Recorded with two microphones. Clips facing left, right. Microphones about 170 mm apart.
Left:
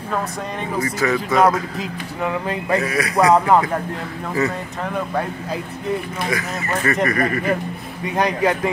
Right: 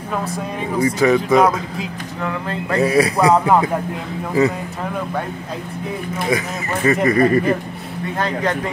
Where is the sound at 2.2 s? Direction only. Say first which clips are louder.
Left 2 dB; 15° left (ahead or behind).